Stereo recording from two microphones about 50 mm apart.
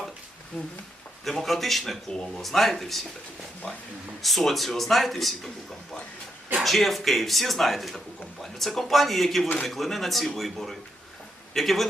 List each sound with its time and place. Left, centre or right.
0.5 s speech: left
1.2 s speech: centre
2.0 s speech: centre
2.4 s speech: centre
4.2 s speech: centre
6.6 s speech: centre